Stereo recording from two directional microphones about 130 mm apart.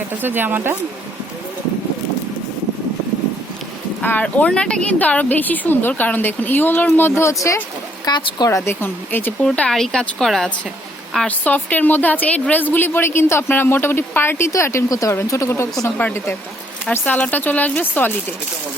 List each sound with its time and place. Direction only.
0.2 s speech: 15° right (ahead or behind)
4.0 s a woman's voice: 10° left (ahead or behind)
9.5 s speech: 5° left (ahead or behind)
11.3 s a woman's voice: 10° left (ahead or behind)